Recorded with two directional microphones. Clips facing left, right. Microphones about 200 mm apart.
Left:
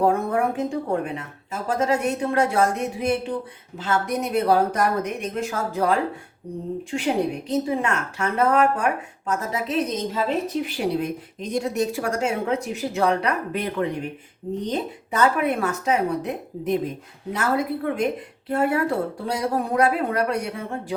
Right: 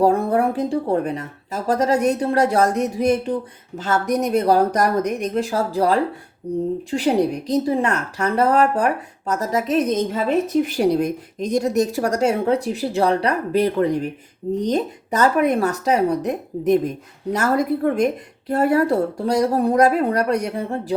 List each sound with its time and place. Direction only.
0.0 s a woman's voice: 35° right (ahead or behind)